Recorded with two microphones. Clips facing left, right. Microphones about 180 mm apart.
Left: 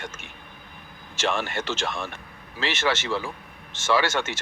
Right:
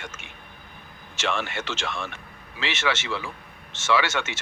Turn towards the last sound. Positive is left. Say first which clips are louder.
# left 1 dB
turn(degrees=35)  # may be behind; listen again after turning